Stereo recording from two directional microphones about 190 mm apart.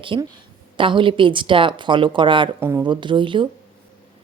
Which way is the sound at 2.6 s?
15° right (ahead or behind).